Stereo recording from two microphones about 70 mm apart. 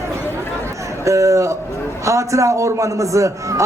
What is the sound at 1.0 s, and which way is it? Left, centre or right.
A man's voice, right.